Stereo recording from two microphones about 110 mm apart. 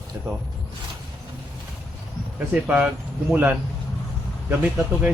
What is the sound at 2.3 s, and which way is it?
Speech, 15° right (ahead or behind).